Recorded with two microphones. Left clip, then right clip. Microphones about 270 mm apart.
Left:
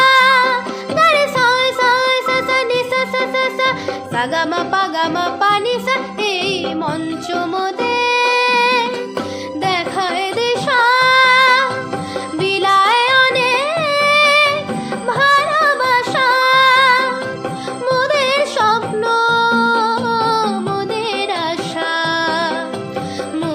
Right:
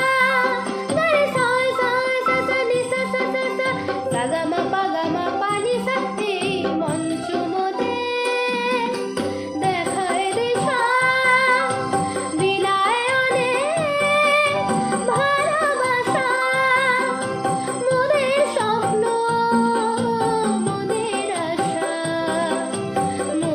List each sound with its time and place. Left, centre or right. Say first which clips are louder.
0.0 s music: left 7 dB; centre
7.9 s music: left 8 dB; left